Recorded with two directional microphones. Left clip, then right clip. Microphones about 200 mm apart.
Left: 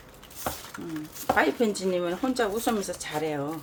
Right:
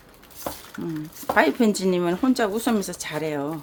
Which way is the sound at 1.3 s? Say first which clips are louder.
Right 4 dB; 50° right (ahead or behind).